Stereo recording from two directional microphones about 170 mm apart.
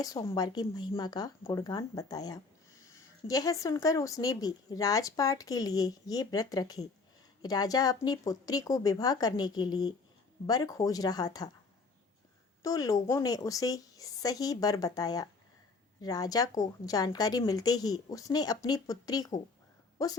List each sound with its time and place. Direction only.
0.0 s a woman's voice: 20° left (ahead or behind)
12.6 s a woman's voice: 20° left (ahead or behind)